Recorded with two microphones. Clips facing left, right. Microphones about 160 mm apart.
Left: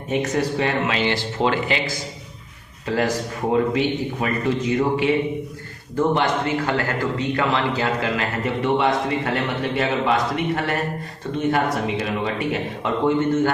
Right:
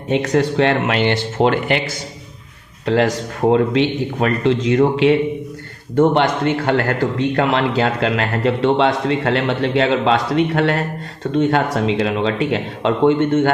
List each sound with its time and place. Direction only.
0.1 s speech: 90° right; by 1.8 s 60° right (ahead or behind)
2.8 s a man's voice: 70° right (ahead or behind)